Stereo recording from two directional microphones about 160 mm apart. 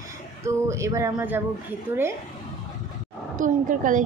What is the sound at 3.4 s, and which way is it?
Speech, 55° right (ahead or behind).